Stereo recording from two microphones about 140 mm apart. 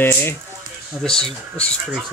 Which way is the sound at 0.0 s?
15° left (ahead or behind).